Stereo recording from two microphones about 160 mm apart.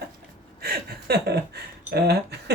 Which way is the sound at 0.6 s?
75° right (ahead or behind).